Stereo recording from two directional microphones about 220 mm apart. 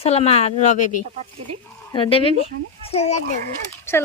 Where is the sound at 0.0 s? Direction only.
30° left (ahead or behind).